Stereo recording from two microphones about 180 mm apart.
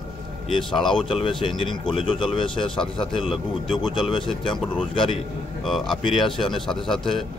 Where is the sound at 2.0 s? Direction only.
25° left (ahead or behind).